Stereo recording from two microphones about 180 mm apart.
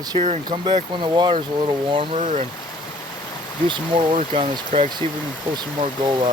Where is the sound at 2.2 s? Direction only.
45° right (ahead or behind).